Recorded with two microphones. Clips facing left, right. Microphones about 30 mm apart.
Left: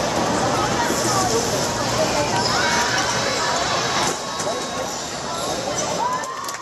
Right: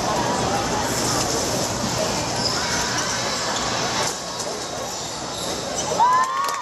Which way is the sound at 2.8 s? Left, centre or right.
Left.